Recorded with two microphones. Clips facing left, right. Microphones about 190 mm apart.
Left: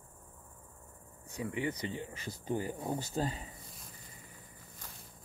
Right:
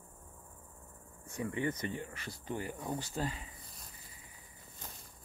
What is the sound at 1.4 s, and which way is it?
Speech, 15° left (ahead or behind).